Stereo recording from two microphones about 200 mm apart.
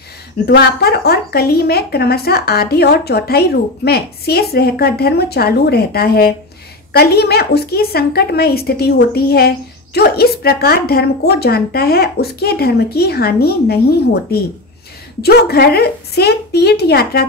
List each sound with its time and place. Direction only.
0.5 s speech: 55° left (ahead or behind)